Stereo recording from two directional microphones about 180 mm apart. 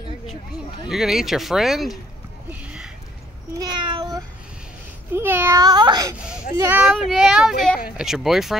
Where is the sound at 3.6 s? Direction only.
25° right (ahead or behind).